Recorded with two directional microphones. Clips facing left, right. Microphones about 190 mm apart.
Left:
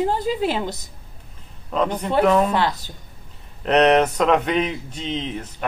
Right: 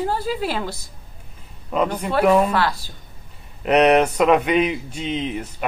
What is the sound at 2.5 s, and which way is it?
Speech, 20° left (ahead or behind).